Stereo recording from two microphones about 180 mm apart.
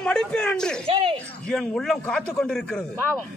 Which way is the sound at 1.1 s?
5° left (ahead or behind).